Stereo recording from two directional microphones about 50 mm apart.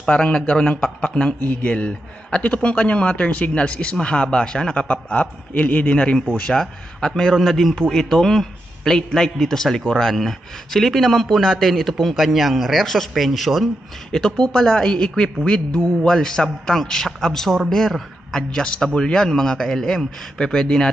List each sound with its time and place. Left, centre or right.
0.0 s speech: centre
1.4 s speech: left
6.5 s a man's voice: centre
14.1 s a man's voice: centre